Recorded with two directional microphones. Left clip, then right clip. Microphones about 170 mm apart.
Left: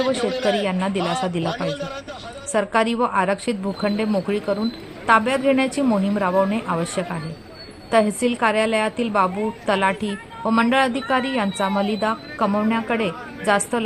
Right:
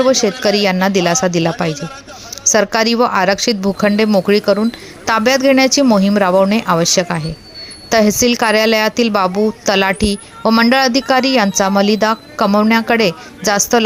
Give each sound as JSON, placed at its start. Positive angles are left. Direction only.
{"t": 0.1, "sound": "a woman's voice", "side_deg": -30}
{"t": 2.5, "sound": "a woman's voice", "side_deg": -30}